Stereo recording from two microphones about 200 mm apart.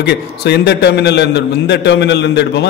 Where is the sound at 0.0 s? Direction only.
55° left (ahead or behind).